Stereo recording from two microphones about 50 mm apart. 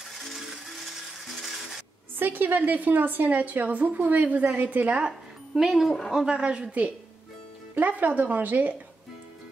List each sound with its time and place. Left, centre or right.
0.2 s ratchet: centre
2.1 s a woman's voice: right
5.0 s music: centre
5.7 s speech: centre
6.1 s speech: centre
7.7 s a woman's voice: right